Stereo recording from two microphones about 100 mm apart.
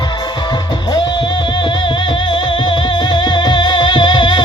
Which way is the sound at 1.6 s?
50° left (ahead or behind).